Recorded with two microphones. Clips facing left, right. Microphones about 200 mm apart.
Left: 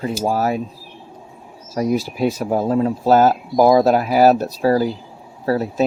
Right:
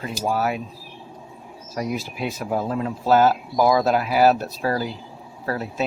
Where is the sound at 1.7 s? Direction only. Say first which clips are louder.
Left 8 dB; 35° left (ahead or behind).